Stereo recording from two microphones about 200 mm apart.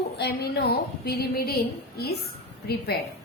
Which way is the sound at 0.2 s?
50° left (ahead or behind).